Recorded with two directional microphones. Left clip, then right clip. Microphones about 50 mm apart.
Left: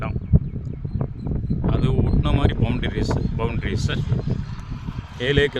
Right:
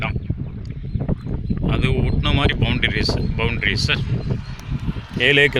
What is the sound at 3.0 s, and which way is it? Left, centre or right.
Speech, centre.